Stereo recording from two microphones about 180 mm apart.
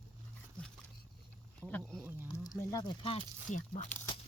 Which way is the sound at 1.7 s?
5° left (ahead or behind).